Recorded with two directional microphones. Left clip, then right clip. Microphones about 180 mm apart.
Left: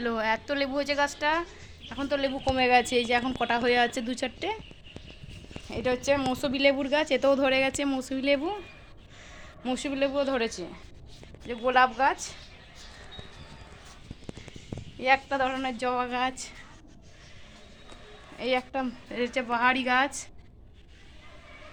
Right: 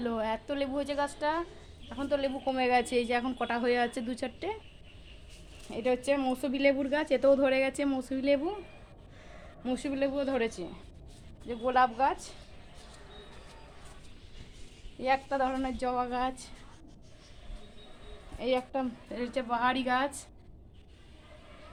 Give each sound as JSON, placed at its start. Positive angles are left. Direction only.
{"t": 0.0, "sound": "a woman's voice", "side_deg": 10}
{"t": 5.7, "sound": "a woman's voice", "side_deg": 25}
{"t": 9.6, "sound": "a woman's voice", "side_deg": 15}
{"t": 15.0, "sound": "a woman's voice", "side_deg": 25}
{"t": 18.3, "sound": "a woman's voice", "side_deg": 25}